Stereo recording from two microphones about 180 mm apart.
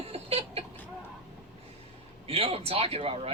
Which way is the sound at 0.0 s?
35° right (ahead or behind).